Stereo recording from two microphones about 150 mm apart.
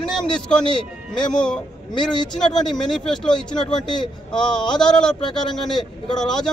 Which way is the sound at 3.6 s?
30° left (ahead or behind).